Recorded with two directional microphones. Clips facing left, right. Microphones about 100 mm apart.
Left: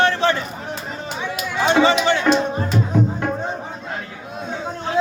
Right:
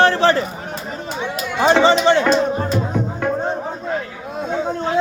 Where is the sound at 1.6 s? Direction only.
35° right (ahead or behind).